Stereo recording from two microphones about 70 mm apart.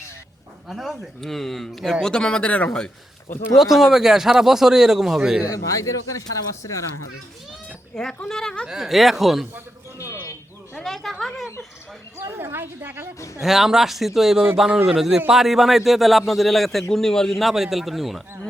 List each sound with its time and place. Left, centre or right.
0.7 s a man's voice: centre
3.6 s a man's voice: centre
5.4 s speech: left
7.9 s speech: centre
8.6 s a man's voice: centre
10.8 s a man's voice: centre
12.2 s speech: right
13.1 s speech: left
13.4 s a man's voice: centre